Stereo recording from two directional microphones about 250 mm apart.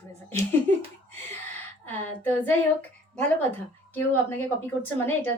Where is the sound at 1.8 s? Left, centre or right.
Centre.